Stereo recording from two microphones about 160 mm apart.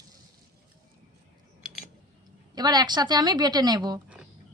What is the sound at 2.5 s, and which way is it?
A woman's voice, 25° right (ahead or behind).